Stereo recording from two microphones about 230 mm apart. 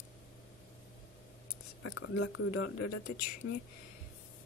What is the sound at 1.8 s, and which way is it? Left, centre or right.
Speech, left.